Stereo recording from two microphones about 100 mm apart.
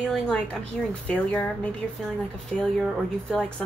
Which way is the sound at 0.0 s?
5° left (ahead or behind).